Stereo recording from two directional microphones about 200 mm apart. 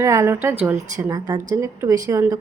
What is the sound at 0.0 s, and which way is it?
A woman's voice, 15° right (ahead or behind).